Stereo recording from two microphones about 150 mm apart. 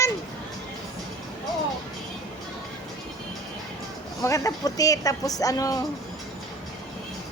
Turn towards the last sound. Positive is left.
turn(degrees=25)  # may be behind; listen again after turning